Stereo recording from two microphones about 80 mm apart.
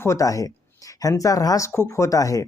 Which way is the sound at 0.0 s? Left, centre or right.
Left.